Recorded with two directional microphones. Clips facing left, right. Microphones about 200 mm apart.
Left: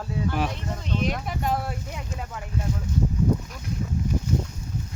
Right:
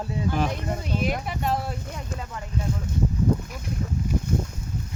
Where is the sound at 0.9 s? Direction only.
5° right (ahead or behind).